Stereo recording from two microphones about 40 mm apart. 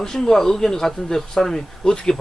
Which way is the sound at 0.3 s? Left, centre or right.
Centre.